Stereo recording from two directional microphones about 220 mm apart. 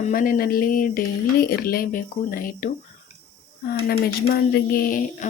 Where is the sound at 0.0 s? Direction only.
40° left (ahead or behind).